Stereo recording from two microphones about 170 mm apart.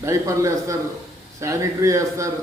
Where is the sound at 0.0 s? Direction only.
20° right (ahead or behind).